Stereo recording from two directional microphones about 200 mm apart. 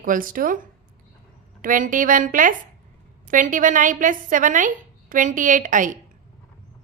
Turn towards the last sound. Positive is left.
turn(degrees=-40)  # may be behind; listen again after turning